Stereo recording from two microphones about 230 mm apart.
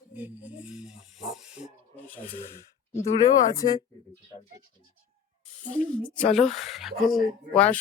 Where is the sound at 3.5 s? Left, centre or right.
Centre.